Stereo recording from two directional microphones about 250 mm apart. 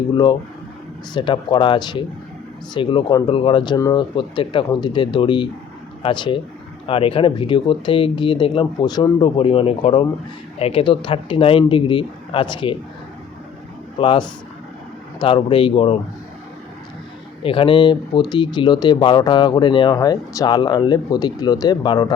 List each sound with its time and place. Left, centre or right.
1.1 s speech: centre
14.0 s speech: centre
17.4 s speech: left